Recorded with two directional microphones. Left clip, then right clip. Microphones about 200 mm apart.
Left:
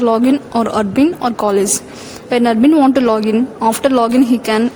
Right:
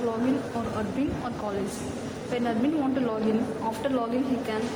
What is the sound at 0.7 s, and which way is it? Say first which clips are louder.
A woman's voice: left 16 dB; 60° left (ahead or behind).